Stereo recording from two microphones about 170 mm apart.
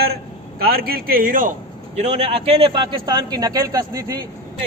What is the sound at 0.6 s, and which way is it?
Speech, 65° right (ahead or behind).